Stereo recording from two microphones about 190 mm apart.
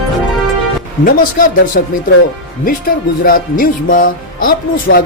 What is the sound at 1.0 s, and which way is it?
Speech, 45° left (ahead or behind).